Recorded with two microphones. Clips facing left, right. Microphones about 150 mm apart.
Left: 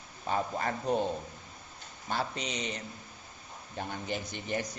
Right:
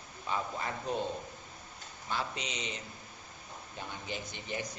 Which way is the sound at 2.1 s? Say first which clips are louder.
Left 3 dB; 40° left (ahead or behind).